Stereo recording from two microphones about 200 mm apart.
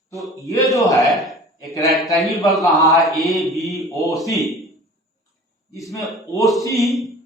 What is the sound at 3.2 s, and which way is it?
Mantra, centre (ahead or behind).